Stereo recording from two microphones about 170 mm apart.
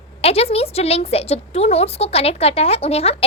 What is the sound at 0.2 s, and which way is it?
A woman's voice, 35° left (ahead or behind).